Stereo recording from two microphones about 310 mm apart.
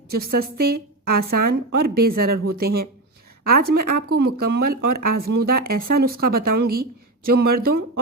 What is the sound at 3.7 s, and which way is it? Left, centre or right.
Speech, right.